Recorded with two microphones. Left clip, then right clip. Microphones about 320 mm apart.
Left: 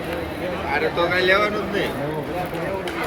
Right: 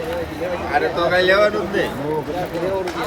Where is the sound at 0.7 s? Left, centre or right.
Right.